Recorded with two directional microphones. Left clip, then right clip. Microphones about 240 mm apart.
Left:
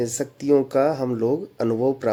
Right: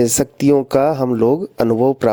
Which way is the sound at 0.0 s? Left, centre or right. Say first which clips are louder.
Right 10 dB; right.